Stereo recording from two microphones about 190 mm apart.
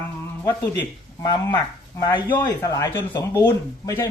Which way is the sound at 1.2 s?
20° left (ahead or behind).